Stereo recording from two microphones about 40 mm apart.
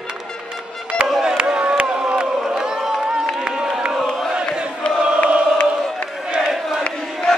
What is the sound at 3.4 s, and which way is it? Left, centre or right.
Crowd, right.